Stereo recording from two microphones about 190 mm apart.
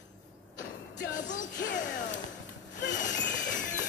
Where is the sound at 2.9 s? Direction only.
40° left (ahead or behind).